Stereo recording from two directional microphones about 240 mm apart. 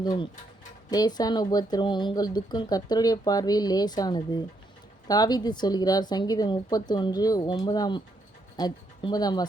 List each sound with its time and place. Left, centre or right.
0.9 s speech: centre